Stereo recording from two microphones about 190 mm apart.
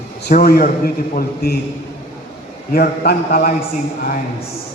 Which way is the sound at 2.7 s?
50° left (ahead or behind).